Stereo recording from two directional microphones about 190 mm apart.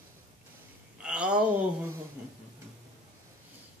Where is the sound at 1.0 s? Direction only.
5° right (ahead or behind).